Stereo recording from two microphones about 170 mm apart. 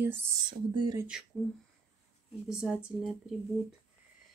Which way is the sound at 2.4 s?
Centre (ahead or behind).